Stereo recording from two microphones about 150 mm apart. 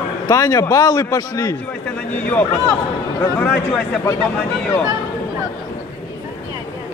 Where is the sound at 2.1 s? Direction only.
10° left (ahead or behind).